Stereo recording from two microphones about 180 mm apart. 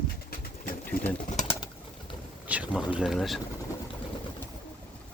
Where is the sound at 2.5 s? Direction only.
10° right (ahead or behind).